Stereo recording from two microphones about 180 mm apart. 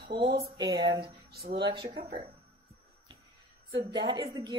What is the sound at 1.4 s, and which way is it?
Speech, 60° right (ahead or behind).